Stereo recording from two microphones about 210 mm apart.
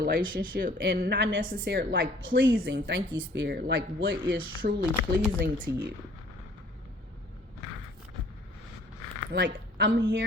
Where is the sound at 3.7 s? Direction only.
70° right (ahead or behind).